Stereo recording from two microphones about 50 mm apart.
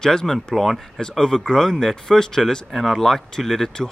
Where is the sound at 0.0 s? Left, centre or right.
Centre.